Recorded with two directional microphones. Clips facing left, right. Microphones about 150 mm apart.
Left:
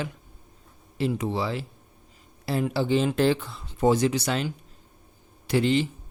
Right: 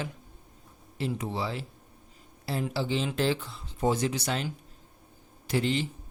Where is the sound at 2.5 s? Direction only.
65° left (ahead or behind).